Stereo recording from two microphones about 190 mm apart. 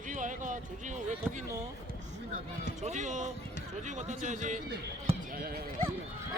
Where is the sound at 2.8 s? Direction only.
40° right (ahead or behind).